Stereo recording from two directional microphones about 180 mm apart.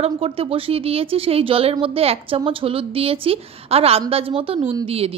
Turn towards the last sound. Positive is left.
turn(degrees=-30)  # may be behind; listen again after turning